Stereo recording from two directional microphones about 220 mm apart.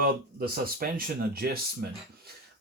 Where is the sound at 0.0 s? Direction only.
45° right (ahead or behind).